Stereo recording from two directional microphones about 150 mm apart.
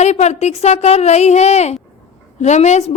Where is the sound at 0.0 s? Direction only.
45° left (ahead or behind).